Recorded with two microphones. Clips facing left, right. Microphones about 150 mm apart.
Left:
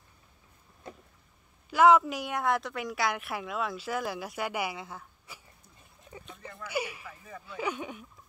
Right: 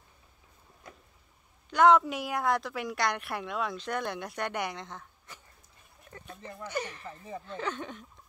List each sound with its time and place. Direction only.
1.7 s a woman's voice: 5° left (ahead or behind)
6.0 s a sound: 15° left (ahead or behind)
6.3 s a sound: 20° right (ahead or behind)
6.6 s speech: 10° left (ahead or behind)
7.1 s speech: 25° right (ahead or behind)
7.4 s speech: 10° left (ahead or behind)